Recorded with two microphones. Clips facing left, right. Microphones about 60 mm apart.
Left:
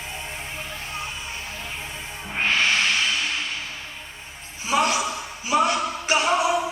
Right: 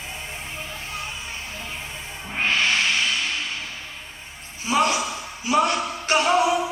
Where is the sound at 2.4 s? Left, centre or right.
Left.